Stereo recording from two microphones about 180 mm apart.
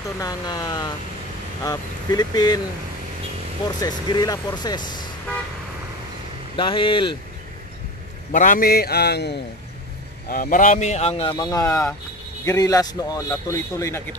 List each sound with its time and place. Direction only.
0.2 s speech: 20° left (ahead or behind)
3.8 s speech: 20° left (ahead or behind)
6.5 s speech: 30° left (ahead or behind)
8.3 s a man's voice: 45° left (ahead or behind); by 9.4 s 65° left (ahead or behind)
10.3 s a man's voice: 50° left (ahead or behind); by 14.0 s 15° left (ahead or behind)